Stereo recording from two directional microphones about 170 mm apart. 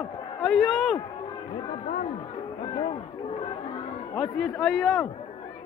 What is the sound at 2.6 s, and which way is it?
Speech, 30° left (ahead or behind).